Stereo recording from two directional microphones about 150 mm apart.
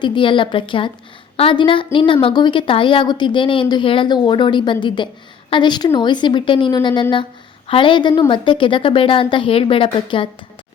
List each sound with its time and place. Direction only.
0.0 s a woman's voice: 35° left (ahead or behind)